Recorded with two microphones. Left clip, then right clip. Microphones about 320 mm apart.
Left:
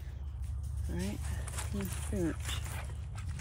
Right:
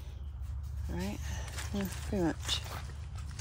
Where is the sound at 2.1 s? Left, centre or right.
Centre.